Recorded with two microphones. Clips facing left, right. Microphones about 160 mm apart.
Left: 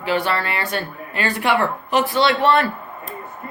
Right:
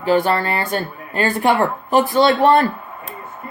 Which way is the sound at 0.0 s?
45° right (ahead or behind).